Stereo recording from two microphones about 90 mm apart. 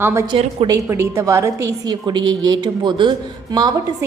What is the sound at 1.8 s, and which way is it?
A woman's voice, 55° right (ahead or behind).